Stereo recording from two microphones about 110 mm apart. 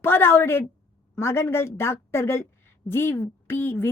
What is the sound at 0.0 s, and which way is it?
A woman's voice, 20° left (ahead or behind).